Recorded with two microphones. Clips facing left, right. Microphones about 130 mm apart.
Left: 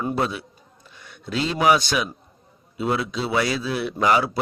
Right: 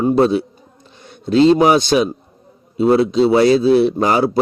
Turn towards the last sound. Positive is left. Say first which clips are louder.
# right 5 dB
turn(degrees=-35)  # may be behind; listen again after turning